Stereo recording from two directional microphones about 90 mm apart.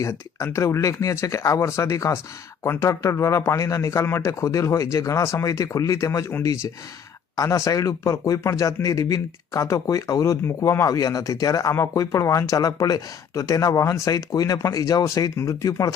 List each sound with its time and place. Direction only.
0.0 s speech: 35° left (ahead or behind)